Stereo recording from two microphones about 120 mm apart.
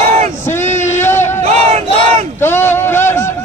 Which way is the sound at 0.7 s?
75° left (ahead or behind).